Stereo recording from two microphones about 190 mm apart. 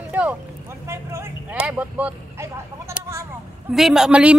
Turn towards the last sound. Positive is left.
turn(degrees=-5)  # may be behind; listen again after turning